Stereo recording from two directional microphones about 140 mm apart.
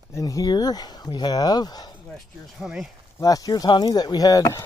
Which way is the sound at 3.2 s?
25° left (ahead or behind).